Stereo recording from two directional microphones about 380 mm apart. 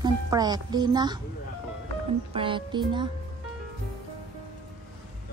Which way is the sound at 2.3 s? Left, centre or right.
Centre.